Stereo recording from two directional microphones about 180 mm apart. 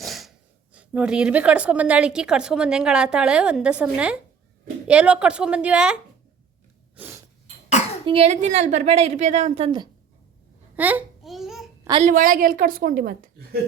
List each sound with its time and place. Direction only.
0.0 s a woman's voice: centre (ahead or behind)
6.9 s a sound: 10° right (ahead or behind)
8.0 s a woman's voice: 35° right (ahead or behind)
10.8 s babbling: 10° right (ahead or behind)
12.0 s a woman's voice: 50° right (ahead or behind)